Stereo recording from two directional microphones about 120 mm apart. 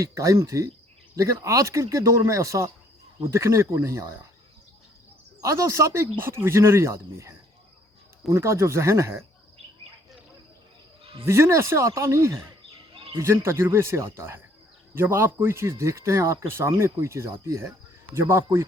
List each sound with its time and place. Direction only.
0.0 s speech: 25° right (ahead or behind)
5.4 s speech: 25° right (ahead or behind)
11.3 s speech: 20° right (ahead or behind)